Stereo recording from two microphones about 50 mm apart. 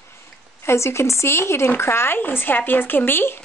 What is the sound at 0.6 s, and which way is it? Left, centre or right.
Speech, left.